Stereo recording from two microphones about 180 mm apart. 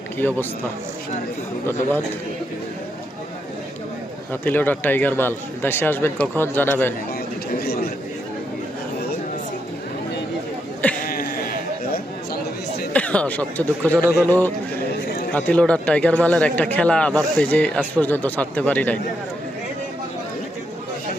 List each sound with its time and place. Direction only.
0.2 s a man's voice: 10° left (ahead or behind)
4.3 s a man's voice: 10° left (ahead or behind)
7.6 s chatter: 60° left (ahead or behind)
11.0 s a sound: 55° left (ahead or behind)
12.9 s a man's voice: 5° left (ahead or behind)